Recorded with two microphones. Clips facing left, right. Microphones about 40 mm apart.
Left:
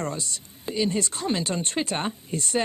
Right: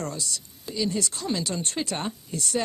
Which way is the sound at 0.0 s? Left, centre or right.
Left.